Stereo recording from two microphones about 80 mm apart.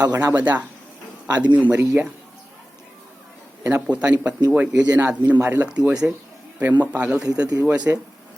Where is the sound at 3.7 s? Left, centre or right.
Centre.